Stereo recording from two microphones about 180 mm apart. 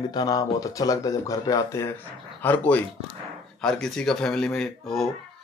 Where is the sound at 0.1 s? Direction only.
20° left (ahead or behind).